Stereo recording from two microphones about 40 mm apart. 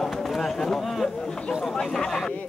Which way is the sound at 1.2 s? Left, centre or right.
Centre.